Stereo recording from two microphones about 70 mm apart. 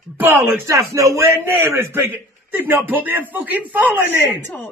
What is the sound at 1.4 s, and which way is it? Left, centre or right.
A man's voice, right.